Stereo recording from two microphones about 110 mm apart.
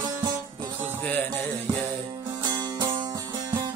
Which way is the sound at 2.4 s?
40° right (ahead or behind).